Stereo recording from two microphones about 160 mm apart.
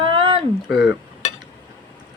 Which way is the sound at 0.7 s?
5° right (ahead or behind).